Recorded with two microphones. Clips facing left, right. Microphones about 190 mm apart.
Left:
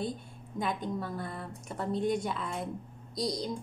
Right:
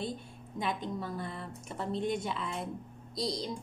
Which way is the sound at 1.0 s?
Centre (ahead or behind).